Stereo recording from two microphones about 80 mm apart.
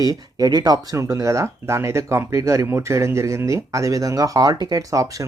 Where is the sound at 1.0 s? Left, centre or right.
Right.